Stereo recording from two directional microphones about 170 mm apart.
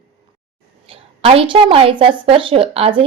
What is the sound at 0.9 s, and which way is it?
A woman's voice, 35° right (ahead or behind).